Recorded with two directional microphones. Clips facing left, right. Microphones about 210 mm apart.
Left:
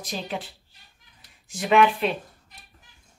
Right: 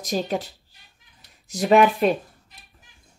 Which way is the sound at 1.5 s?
40° right (ahead or behind).